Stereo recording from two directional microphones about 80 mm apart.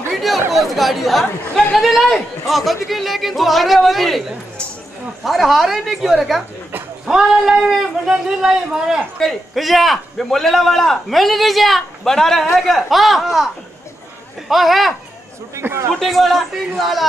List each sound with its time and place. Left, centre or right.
0.1 s a sound: centre
0.5 s a man's voice: centre
5.2 s a man's voice: centre
14.5 s a man's voice: centre
15.5 s a man's voice: right
16.0 s a man's voice: centre